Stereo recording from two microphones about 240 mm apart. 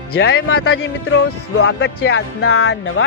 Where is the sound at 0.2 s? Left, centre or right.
Left.